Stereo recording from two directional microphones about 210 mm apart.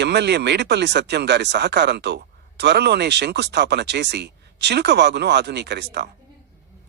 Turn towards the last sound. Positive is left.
turn(degrees=-55)  # may be behind; listen again after turning